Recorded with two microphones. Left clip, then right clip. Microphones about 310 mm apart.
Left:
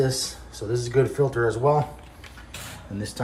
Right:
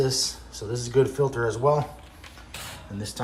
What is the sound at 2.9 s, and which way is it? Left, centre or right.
Speech, right.